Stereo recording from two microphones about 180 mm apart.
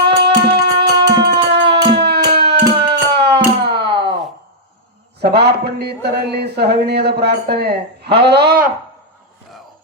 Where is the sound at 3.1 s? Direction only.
65° right (ahead or behind).